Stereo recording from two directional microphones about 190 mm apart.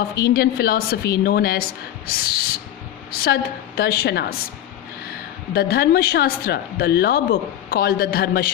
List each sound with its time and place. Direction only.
0.2 s a woman's voice: 55° left (ahead or behind)
5.5 s speech: 55° left (ahead or behind)